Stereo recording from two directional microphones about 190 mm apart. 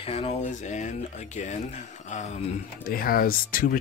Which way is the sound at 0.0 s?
30° left (ahead or behind).